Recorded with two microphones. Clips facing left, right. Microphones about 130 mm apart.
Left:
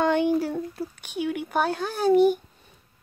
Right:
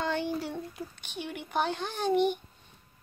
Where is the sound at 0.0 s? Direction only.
60° left (ahead or behind).